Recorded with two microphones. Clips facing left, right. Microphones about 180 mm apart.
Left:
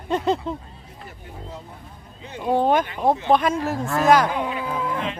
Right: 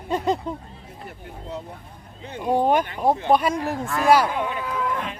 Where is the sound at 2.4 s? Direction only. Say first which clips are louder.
Left 1 dB; 10° right (ahead or behind).